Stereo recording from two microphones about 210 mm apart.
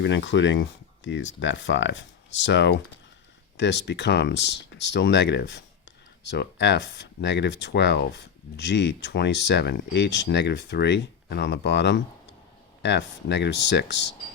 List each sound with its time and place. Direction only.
0.0 s speech: 55° left (ahead or behind)